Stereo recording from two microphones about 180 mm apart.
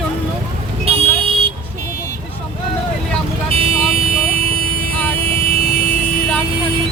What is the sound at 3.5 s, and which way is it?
Vehicle, 35° right (ahead or behind).